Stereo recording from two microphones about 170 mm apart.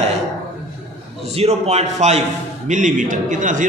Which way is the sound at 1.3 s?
40° right (ahead or behind).